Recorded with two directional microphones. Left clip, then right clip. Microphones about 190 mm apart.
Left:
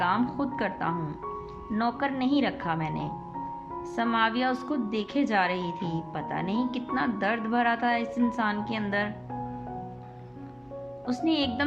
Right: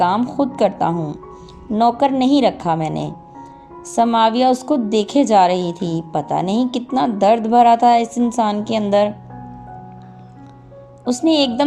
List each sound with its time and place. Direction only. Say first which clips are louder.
0.0 s a woman's voice: right 10 dB; 25° right (ahead or behind)
11.0 s a woman's voice: right 12 dB; 30° right (ahead or behind)